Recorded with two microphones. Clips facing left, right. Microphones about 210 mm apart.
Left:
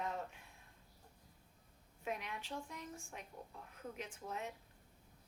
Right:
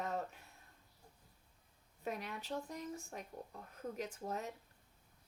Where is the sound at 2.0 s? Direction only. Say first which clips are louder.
Right 2 dB; 40° right (ahead or behind).